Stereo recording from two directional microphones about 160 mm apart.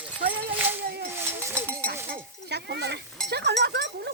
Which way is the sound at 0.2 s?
75° right (ahead or behind).